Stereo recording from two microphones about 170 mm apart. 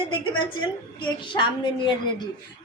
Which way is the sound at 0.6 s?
30° left (ahead or behind).